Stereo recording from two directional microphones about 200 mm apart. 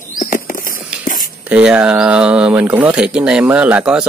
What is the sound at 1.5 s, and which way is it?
Speech, 5° right (ahead or behind).